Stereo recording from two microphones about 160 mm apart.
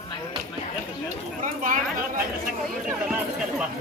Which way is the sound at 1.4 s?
55° right (ahead or behind).